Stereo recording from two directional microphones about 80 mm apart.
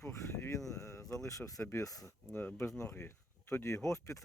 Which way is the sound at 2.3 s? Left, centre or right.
Left.